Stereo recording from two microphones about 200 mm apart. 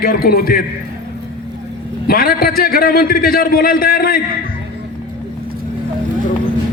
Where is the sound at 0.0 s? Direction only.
50° left (ahead or behind).